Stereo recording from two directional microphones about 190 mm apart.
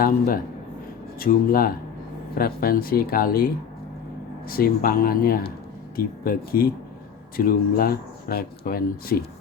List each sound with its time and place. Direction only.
1.2 s speech: 50° left (ahead or behind)